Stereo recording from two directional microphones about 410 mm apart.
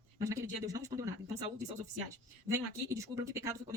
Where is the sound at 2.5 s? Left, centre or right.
Centre.